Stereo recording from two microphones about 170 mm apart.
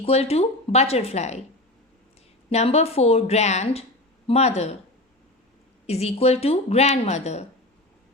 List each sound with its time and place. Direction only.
0.0 s speech: 35° left (ahead or behind)
2.5 s speech: 40° left (ahead or behind)
5.8 s speech: 40° left (ahead or behind)